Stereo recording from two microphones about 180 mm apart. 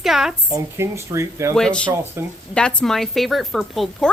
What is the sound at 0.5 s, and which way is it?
Speech, 15° right (ahead or behind).